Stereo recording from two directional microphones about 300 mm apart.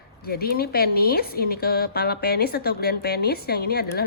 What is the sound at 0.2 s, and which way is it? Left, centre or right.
Speech, left.